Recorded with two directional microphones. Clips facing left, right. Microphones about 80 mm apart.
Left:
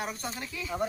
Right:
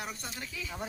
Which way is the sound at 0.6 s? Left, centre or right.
Left.